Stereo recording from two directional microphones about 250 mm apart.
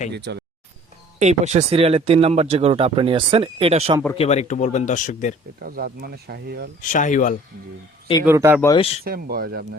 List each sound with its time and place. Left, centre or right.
0.1 s speech: right
1.2 s speech: right
4.1 s speech: left
5.6 s speech: right
6.8 s speech: left
8.2 s speech: centre
8.6 s speech: centre
9.0 s speech: right